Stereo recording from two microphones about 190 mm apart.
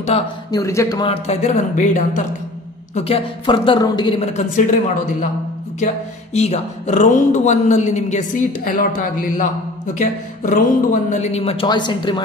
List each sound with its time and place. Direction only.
0.1 s a woman's voice: 30° left (ahead or behind)
0.5 s a woman's voice: 15° left (ahead or behind)
4.2 s a woman's voice: 35° left (ahead or behind)
6.3 s a woman's voice: 35° left (ahead or behind)